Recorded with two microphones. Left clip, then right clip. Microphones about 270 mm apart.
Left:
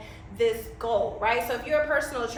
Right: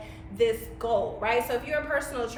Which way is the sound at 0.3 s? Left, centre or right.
Centre.